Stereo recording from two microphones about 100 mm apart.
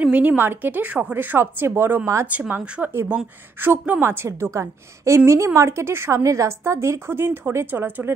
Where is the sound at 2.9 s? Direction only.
25° right (ahead or behind).